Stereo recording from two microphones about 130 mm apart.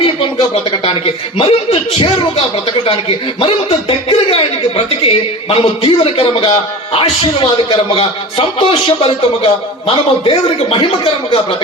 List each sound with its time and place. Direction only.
0.0 s a man's voice: 45° left (ahead or behind)
3.4 s a man's voice: 45° left (ahead or behind)